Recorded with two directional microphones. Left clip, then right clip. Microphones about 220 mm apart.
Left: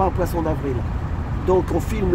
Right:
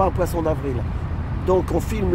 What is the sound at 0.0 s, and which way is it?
Speech, 10° right (ahead or behind).